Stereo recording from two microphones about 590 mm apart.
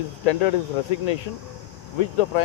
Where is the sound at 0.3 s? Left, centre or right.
Left.